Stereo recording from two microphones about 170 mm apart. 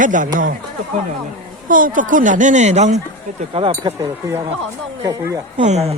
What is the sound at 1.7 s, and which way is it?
Speech, 50° right (ahead or behind).